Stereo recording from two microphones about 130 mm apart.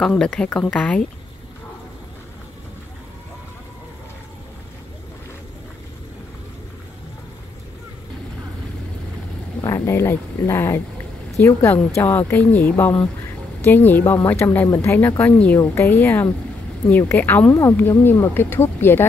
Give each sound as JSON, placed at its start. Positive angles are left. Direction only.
{"t": 0.0, "sound": "speech", "side_deg": 5}
{"t": 9.6, "sound": "speech", "side_deg": 20}